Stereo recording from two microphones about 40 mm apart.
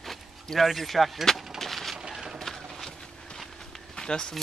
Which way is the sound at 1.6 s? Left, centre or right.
Centre.